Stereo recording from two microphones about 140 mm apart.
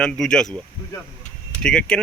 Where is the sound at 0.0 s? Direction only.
5° left (ahead or behind).